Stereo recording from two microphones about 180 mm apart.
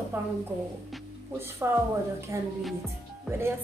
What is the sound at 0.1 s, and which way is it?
Speech, 10° right (ahead or behind).